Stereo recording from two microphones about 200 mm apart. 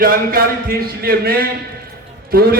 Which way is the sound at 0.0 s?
45° right (ahead or behind).